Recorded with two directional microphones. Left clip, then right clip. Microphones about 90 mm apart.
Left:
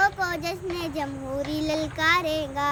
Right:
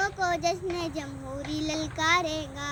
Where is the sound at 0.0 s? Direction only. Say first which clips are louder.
Left 3 dB; 45° left (ahead or behind).